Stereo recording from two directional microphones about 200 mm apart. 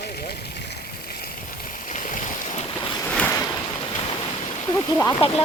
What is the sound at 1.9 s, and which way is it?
Stream, 40° left (ahead or behind).